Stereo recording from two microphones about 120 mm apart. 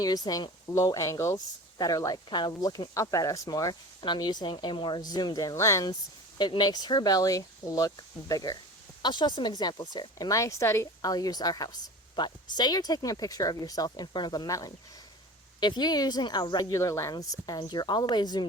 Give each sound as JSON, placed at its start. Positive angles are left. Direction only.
{"t": 0.0, "sound": "speech", "side_deg": 30}